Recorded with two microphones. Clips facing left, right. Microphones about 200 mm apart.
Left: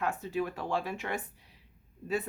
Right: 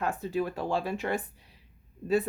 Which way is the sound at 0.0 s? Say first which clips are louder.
Right 2 dB; 35° right (ahead or behind).